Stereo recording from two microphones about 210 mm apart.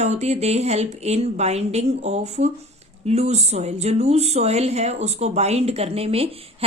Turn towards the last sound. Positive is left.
turn(degrees=-30)  # may be behind; listen again after turning